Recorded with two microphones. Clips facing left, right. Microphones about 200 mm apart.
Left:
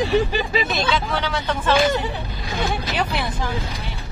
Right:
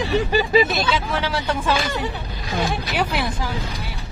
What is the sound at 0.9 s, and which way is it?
Speech, 5° right (ahead or behind).